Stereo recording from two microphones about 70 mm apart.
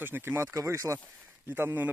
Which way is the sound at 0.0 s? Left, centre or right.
Right.